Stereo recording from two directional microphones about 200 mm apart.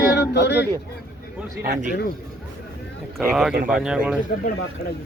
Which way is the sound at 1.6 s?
40° right (ahead or behind).